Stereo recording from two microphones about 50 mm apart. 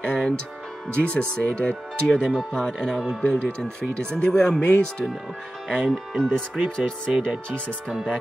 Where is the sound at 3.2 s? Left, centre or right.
Left.